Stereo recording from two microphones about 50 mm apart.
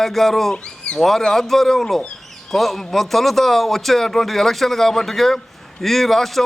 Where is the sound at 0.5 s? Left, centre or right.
Centre.